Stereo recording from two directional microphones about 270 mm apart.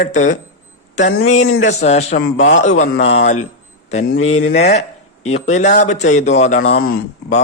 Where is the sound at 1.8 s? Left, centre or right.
Left.